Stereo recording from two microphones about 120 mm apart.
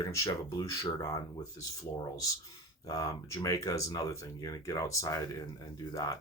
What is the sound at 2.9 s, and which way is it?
Speech, 30° left (ahead or behind).